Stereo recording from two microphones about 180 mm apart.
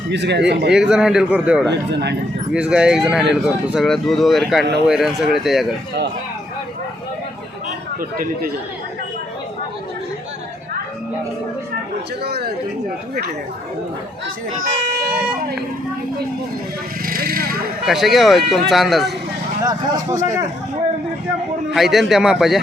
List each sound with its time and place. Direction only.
0.1 s speech: 70° right (ahead or behind)
0.7 s speech: 5° right (ahead or behind)
1.7 s speech: 70° right (ahead or behind)
2.5 s speech: 5° right (ahead or behind)
12.2 s speech: 60° right (ahead or behind)
14.7 s speech: 60° right (ahead or behind)
17.1 s speech: 55° right (ahead or behind)
17.8 s speech: centre (ahead or behind)
21.7 s speech: centre (ahead or behind)